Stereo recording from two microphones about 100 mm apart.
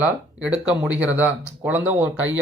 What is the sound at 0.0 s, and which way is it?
Speech, 10° right (ahead or behind).